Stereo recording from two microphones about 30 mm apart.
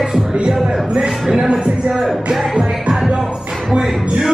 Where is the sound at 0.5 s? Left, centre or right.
Right.